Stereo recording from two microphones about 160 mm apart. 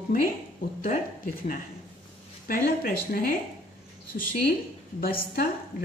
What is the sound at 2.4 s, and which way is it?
A woman's voice, 60° left (ahead or behind).